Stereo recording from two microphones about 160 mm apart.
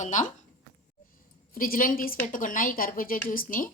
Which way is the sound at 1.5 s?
60° left (ahead or behind).